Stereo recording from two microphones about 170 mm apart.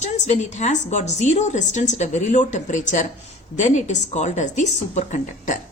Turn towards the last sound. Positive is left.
turn(degrees=45)  # may be behind; listen again after turning